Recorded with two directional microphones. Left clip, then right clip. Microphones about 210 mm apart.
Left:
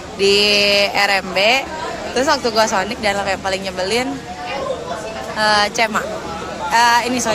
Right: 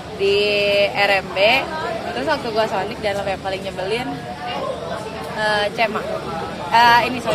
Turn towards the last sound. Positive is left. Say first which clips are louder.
# even
turn(degrees=55)  # may be behind; listen again after turning